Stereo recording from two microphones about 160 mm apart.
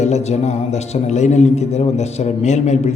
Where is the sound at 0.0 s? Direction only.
45° left (ahead or behind).